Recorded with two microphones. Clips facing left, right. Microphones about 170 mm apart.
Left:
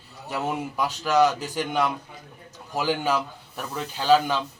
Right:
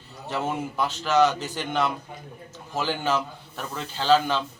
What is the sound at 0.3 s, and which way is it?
Speech, 10° left (ahead or behind).